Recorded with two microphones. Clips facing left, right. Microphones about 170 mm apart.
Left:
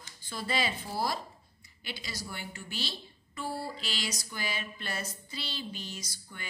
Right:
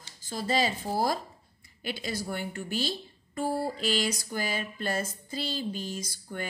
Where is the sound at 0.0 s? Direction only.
40° right (ahead or behind).